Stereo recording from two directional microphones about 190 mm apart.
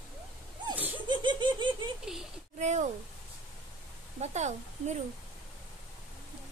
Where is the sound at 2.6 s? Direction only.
40° right (ahead or behind).